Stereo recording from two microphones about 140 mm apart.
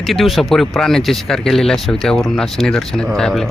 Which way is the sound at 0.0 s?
Centre (ahead or behind).